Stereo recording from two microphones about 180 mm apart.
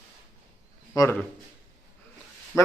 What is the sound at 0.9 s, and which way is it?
Speech, 20° left (ahead or behind).